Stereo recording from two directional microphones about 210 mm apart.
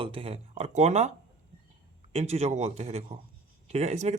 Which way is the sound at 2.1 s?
30° right (ahead or behind).